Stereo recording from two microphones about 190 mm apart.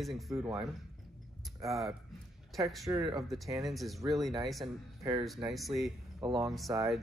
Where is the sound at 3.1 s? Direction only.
Centre (ahead or behind).